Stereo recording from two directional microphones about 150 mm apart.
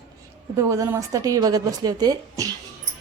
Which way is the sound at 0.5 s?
20° right (ahead or behind).